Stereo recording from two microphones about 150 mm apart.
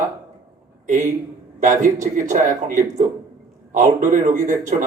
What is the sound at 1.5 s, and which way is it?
Speech, 60° right (ahead or behind).